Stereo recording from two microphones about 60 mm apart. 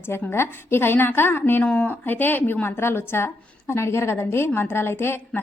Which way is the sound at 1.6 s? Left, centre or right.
Left.